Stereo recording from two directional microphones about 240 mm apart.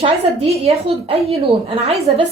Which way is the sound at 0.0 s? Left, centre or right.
Right.